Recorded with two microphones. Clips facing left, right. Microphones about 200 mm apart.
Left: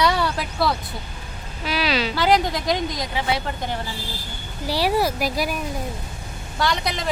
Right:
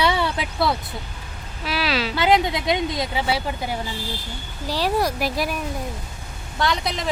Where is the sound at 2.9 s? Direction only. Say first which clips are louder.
Right 1 dB; 25° right (ahead or behind).